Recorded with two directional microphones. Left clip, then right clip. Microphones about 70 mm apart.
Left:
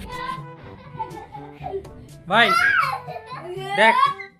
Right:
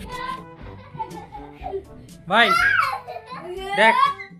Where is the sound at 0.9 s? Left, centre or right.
Centre.